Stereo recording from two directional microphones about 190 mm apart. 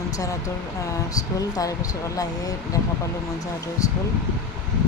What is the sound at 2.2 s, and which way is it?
Speech, 20° left (ahead or behind).